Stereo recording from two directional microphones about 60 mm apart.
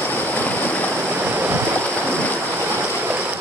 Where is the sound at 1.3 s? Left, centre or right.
Right.